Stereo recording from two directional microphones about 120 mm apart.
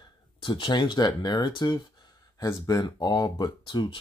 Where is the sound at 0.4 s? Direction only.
40° left (ahead or behind).